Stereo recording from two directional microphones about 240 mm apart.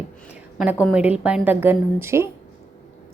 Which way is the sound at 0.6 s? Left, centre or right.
Centre.